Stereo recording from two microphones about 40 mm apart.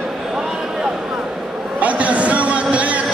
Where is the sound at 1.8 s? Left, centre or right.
Right.